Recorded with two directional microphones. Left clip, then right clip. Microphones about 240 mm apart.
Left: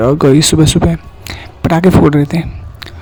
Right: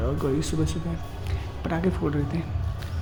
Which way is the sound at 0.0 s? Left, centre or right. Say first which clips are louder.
Left 18 dB; left.